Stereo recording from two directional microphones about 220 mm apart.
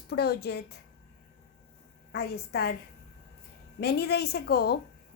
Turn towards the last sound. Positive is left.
turn(degrees=45)  # may be behind; listen again after turning